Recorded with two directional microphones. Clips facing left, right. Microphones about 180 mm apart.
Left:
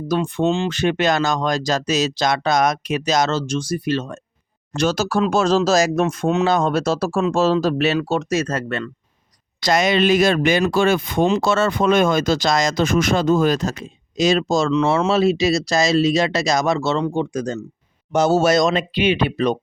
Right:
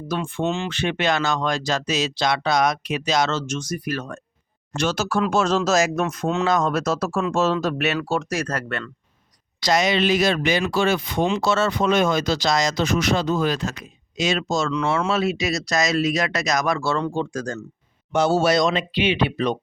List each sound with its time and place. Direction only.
0.1 s speech: 40° left (ahead or behind)
4.8 s speech: 40° left (ahead or behind)
7.9 s speech: 20° left (ahead or behind)
9.6 s speech: 50° left (ahead or behind); by 17.6 s 20° left (ahead or behind)
18.1 s speech: 40° left (ahead or behind)